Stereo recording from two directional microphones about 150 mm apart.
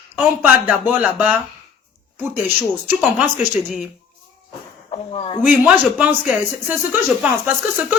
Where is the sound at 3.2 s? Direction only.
5° right (ahead or behind).